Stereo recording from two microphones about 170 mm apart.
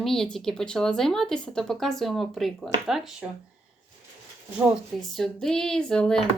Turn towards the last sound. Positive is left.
turn(degrees=5)  # may be behind; listen again after turning